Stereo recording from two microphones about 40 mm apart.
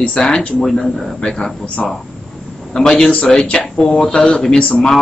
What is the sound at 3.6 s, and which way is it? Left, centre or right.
Speech, left.